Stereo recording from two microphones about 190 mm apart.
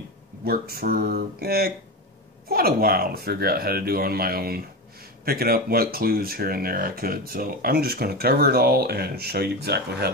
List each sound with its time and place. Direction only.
0.5 s speech: 50° right (ahead or behind)